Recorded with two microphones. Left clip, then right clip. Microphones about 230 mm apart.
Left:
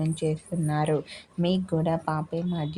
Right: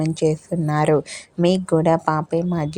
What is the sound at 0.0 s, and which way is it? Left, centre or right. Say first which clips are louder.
Speech: right 9 dB; right.